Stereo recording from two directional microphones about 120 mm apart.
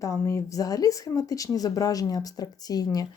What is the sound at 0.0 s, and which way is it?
Speech, 25° left (ahead or behind).